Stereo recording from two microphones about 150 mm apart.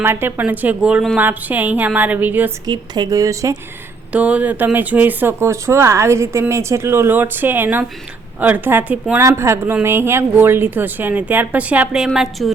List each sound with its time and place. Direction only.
0.0 s speech: 15° right (ahead or behind)
2.6 s speech: 30° right (ahead or behind)
4.1 s speech: 10° right (ahead or behind)